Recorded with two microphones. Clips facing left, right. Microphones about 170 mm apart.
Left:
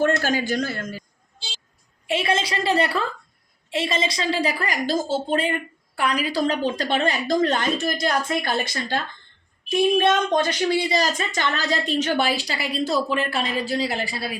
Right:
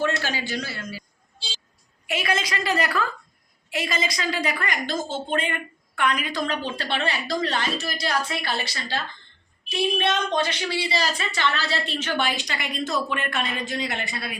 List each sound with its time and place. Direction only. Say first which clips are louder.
0.0 s a woman's voice: left 5 dB; 45° left (ahead or behind)
2.0 s a woman's voice: left 3 dB; 30° left (ahead or behind)